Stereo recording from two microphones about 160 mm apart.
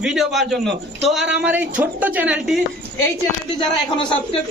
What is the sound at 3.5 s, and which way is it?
Speech, 30° left (ahead or behind).